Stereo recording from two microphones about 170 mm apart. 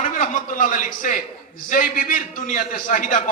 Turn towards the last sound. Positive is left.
turn(degrees=50)  # may be behind; listen again after turning